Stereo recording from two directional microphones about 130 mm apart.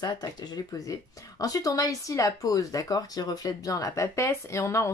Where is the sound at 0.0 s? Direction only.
30° left (ahead or behind).